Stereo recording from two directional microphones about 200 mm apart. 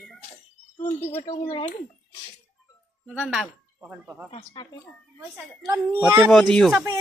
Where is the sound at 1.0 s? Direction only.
15° left (ahead or behind).